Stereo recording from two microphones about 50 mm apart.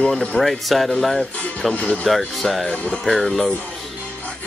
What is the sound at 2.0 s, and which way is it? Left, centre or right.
Speech, centre.